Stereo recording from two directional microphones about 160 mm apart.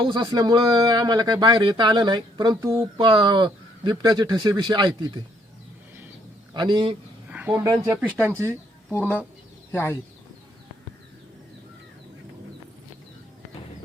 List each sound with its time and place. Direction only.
0.0 s speech: 30° right (ahead or behind)
6.5 s a man's voice: 30° right (ahead or behind)
7.3 s a sound: 10° right (ahead or behind)
7.5 s speech: 20° right (ahead or behind)
8.9 s speech: 10° left (ahead or behind)